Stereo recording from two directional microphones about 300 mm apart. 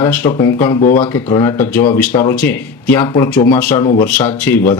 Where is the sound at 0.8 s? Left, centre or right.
Left.